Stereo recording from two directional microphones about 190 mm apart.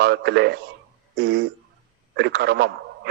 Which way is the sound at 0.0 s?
60° right (ahead or behind).